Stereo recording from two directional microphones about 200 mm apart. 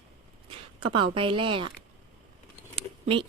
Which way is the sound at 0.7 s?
25° right (ahead or behind).